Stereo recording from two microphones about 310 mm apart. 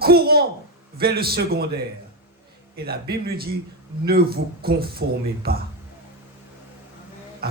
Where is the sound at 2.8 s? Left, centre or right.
Right.